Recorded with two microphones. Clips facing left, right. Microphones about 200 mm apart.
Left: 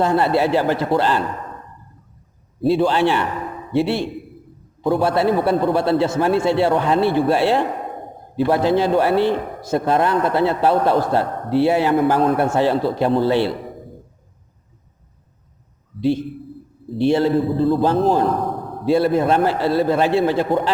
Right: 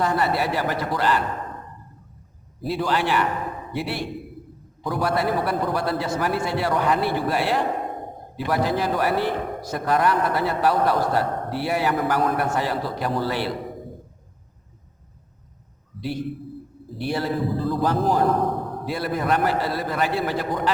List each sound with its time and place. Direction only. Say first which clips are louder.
0.0 s a man's voice: left 6 dB; 25° left (ahead or behind)
2.6 s a man's voice: left 8 dB; 25° left (ahead or behind)
16.0 s a man's voice: left 8 dB; 25° left (ahead or behind)